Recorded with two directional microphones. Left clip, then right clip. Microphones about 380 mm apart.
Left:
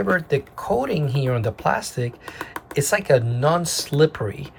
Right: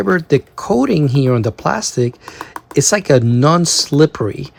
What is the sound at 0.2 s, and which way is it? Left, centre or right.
Speech, centre.